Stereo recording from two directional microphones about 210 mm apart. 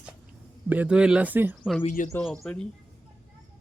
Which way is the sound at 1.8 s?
35° left (ahead or behind).